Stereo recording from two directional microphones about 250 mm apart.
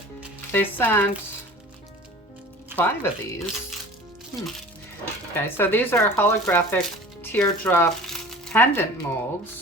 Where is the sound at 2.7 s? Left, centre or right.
Centre.